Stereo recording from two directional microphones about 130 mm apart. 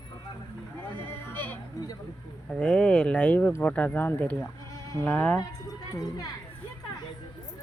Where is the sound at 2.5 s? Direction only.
5° left (ahead or behind).